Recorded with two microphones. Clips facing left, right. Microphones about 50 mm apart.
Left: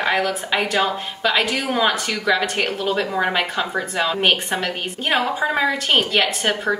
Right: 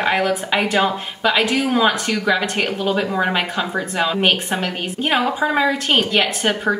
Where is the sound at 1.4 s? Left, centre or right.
Right.